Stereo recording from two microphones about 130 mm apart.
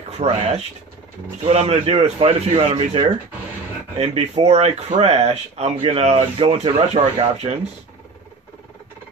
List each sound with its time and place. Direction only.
0.2 s speech: 55° right (ahead or behind)